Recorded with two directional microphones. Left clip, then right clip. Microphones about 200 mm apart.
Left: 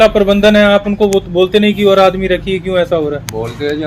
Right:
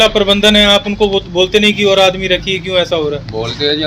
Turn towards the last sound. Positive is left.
turn(degrees=15)  # may be behind; listen again after turning